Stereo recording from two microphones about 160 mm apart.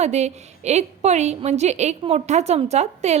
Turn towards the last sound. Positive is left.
turn(degrees=-45)  # may be behind; listen again after turning